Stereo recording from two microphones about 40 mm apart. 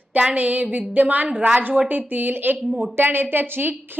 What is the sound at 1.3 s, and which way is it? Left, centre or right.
Speech, right.